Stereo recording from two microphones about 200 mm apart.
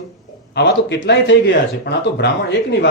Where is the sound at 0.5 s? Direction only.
60° left (ahead or behind).